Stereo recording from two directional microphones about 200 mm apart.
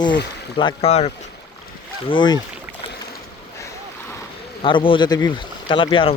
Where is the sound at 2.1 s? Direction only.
20° left (ahead or behind).